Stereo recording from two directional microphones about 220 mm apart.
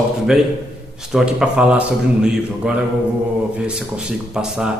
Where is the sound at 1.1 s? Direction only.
5° right (ahead or behind).